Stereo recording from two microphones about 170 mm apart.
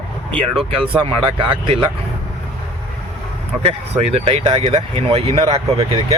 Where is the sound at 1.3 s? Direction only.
35° right (ahead or behind).